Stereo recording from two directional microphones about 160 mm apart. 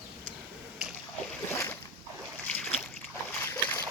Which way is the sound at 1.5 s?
20° left (ahead or behind).